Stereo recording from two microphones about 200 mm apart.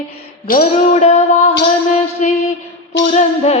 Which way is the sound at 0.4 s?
45° left (ahead or behind).